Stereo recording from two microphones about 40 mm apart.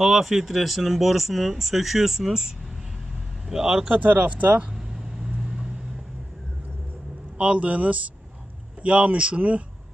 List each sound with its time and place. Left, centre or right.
0.0 s speech: centre
3.4 s speech: centre
3.9 s speech: right
4.7 s vehicle: centre
7.3 s speech: right